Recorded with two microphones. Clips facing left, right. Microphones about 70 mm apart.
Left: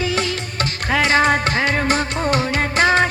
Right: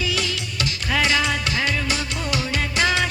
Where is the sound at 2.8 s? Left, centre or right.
Left.